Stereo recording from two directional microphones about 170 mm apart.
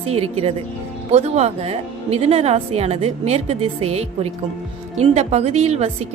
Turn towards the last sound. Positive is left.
turn(degrees=-40)  # may be behind; listen again after turning